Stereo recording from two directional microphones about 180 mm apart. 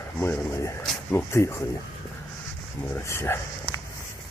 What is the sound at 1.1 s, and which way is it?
Speech, 15° left (ahead or behind).